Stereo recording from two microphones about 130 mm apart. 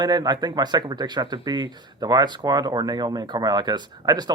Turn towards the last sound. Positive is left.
turn(degrees=-30)  # may be behind; listen again after turning